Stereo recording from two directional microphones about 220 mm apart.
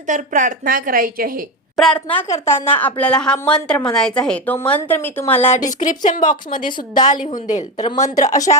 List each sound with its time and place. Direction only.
0.1 s a woman's voice: 35° right (ahead or behind)
1.7 s a woman's voice: 5° left (ahead or behind)
5.6 s a woman's voice: 35° left (ahead or behind)
8.1 s a woman's voice: 35° left (ahead or behind)